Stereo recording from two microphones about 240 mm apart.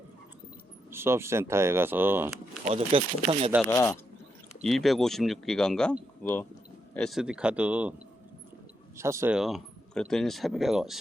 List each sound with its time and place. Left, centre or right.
0.9 s speech: centre
2.6 s speech: right
3.7 s speech: centre
4.6 s speech: centre
9.0 s speech: centre